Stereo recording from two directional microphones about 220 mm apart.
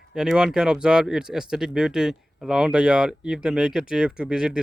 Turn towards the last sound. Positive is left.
turn(degrees=-5)  # may be behind; listen again after turning